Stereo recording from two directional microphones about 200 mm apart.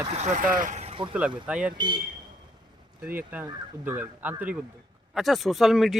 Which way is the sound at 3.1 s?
10° right (ahead or behind).